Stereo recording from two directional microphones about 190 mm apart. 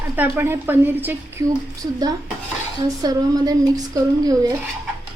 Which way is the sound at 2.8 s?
20° right (ahead or behind).